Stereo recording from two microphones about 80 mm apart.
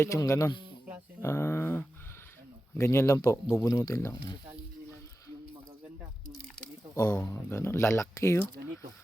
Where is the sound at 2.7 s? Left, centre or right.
Left.